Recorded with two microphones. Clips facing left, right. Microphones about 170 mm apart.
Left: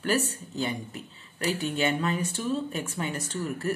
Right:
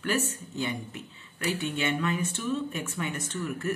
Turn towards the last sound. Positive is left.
turn(degrees=35)  # may be behind; listen again after turning